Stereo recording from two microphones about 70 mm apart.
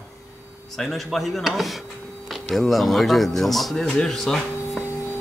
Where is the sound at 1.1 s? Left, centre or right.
Centre.